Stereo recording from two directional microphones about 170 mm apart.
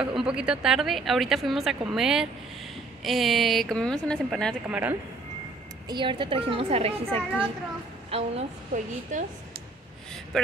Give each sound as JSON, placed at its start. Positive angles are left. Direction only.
{"t": 0.0, "sound": "a woman's voice", "side_deg": -5}
{"t": 4.6, "sound": "speech", "side_deg": -10}
{"t": 5.9, "sound": "a woman's voice", "side_deg": -30}
{"t": 9.1, "sound": "speech", "side_deg": -50}
{"t": 10.3, "sound": "a woman's voice", "side_deg": 5}